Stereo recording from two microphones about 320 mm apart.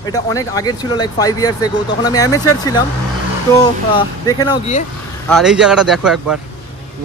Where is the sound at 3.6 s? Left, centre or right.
Centre.